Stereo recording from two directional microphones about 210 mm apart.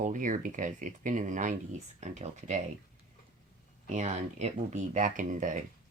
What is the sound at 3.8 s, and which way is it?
Speech, 35° right (ahead or behind).